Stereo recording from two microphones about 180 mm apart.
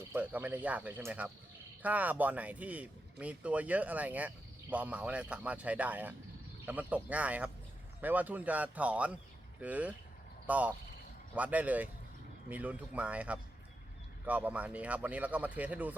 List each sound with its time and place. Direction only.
0.1 s speech: 10° right (ahead or behind)